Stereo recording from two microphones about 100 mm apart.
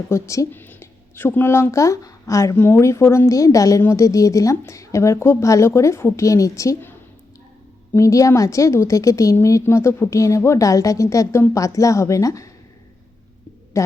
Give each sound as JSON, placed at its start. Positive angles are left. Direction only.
{"t": 0.1, "sound": "a woman's voice", "side_deg": 30}
{"t": 0.5, "sound": "a woman's voice", "side_deg": 20}
{"t": 7.9, "sound": "a woman's voice", "side_deg": 30}
{"t": 13.7, "sound": "a sound", "side_deg": 30}